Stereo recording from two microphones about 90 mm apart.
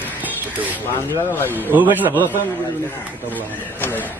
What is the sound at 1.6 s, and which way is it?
Speech, 20° right (ahead or behind).